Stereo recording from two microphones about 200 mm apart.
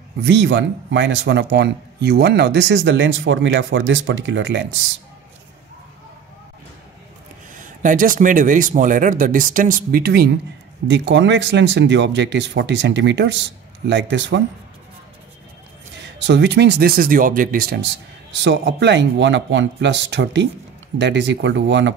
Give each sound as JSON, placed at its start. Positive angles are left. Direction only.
{"t": 0.2, "sound": "a man's voice", "side_deg": -60}
{"t": 7.5, "sound": "a man's voice", "side_deg": -40}
{"t": 16.0, "sound": "a man's voice", "side_deg": -60}